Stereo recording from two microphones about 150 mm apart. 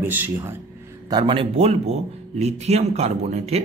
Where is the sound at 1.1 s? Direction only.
35° right (ahead or behind).